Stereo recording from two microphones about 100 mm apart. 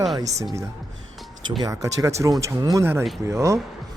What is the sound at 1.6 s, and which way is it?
A man's voice, 35° right (ahead or behind).